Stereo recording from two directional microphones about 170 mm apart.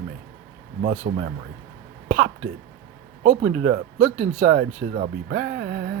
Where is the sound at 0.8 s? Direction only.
55° right (ahead or behind).